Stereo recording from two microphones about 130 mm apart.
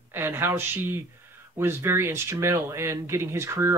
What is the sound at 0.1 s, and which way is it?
Speech, 15° right (ahead or behind).